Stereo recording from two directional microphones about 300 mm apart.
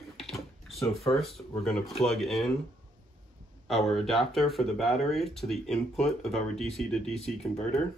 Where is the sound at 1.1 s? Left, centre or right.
Centre.